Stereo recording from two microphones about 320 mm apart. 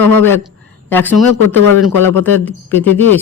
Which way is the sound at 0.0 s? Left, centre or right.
Centre.